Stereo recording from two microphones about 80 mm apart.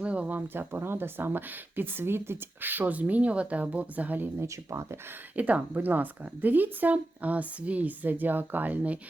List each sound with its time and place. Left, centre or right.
0.0 s speech: centre
4.4 s speech: right
5.4 s speech: centre